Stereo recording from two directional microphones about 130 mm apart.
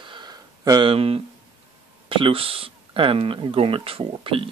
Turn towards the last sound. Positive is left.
turn(degrees=-45)  # may be behind; listen again after turning